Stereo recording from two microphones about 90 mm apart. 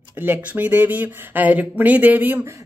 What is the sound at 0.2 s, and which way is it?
Speech, 20° right (ahead or behind).